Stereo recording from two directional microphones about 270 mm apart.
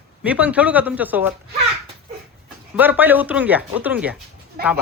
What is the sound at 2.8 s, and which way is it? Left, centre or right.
Speech, centre.